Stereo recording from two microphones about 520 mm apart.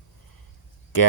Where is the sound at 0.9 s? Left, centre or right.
Left.